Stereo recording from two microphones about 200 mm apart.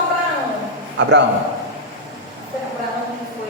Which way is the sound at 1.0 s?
60° right (ahead or behind).